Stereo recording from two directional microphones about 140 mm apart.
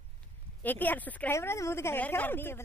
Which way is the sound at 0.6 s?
15° left (ahead or behind).